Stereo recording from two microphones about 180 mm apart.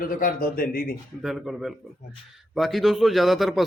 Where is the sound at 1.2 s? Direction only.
Centre (ahead or behind).